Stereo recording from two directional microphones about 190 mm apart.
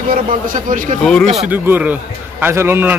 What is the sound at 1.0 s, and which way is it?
Speech, 5° left (ahead or behind).